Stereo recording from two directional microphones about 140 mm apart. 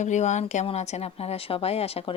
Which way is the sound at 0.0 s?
55° left (ahead or behind).